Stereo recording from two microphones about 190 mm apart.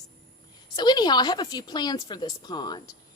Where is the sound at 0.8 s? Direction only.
20° left (ahead or behind).